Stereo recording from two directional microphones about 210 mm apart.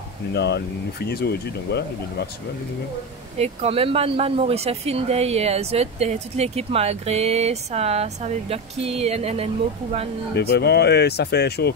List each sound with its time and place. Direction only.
0.3 s speech: 50° left (ahead or behind)
3.3 s speech: 30° right (ahead or behind)
10.3 s speech: 50° left (ahead or behind)